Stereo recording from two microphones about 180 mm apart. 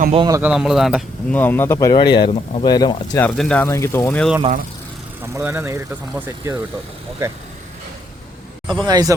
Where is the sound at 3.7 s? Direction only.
15° left (ahead or behind).